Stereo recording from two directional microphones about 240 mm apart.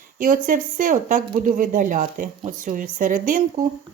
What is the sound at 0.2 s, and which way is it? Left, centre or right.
Speech, right.